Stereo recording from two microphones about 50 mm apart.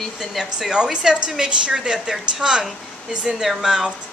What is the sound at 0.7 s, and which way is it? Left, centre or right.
A woman's voice, centre.